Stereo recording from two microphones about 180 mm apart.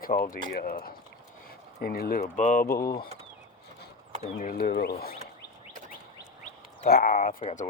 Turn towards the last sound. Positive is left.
turn(degrees=45)  # may be behind; listen again after turning